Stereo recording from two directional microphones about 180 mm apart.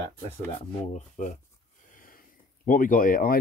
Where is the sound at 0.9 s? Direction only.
45° left (ahead or behind).